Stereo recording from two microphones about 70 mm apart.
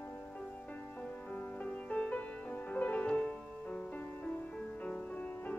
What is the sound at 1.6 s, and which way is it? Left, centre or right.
Music, centre.